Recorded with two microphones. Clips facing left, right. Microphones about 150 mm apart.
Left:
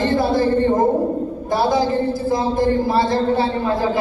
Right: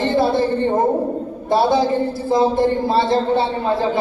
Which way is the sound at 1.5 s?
25° right (ahead or behind).